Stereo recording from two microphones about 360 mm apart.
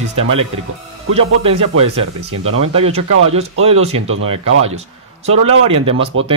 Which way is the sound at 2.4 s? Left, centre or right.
Right.